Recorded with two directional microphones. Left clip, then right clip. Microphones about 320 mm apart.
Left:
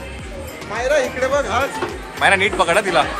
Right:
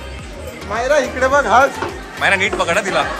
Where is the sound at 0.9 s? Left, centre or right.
Right.